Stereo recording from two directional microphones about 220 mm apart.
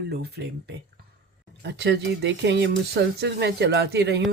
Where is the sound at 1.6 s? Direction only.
50° right (ahead or behind).